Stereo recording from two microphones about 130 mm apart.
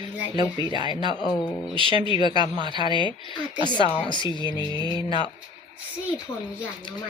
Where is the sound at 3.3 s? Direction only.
35° left (ahead or behind).